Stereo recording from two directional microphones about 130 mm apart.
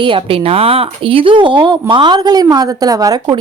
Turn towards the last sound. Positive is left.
turn(degrees=-30)  # may be behind; listen again after turning